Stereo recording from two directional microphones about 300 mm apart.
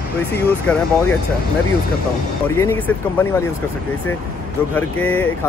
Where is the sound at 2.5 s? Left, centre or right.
Centre.